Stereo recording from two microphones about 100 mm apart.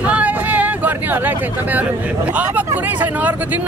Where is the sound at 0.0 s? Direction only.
15° right (ahead or behind).